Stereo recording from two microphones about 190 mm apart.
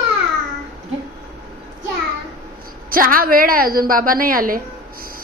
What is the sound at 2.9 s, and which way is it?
A woman's voice, 50° right (ahead or behind).